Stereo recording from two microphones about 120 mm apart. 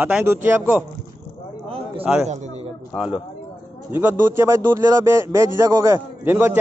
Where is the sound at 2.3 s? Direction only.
70° right (ahead or behind).